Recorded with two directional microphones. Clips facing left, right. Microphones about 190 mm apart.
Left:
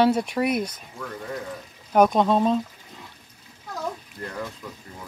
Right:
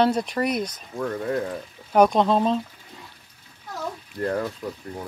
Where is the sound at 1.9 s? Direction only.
Centre (ahead or behind).